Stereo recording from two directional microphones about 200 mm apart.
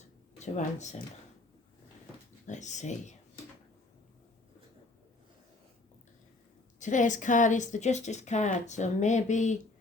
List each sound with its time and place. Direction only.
0.3 s speech: 35° left (ahead or behind)
2.5 s a woman's voice: 35° left (ahead or behind)
6.7 s a woman's voice: 40° left (ahead or behind)